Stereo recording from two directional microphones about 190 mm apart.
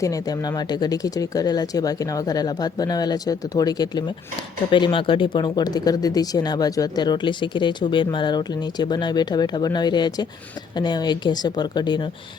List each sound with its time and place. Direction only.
0.0 s speech: 20° left (ahead or behind)